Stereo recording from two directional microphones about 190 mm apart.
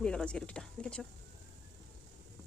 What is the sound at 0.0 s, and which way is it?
Speech, 5° left (ahead or behind).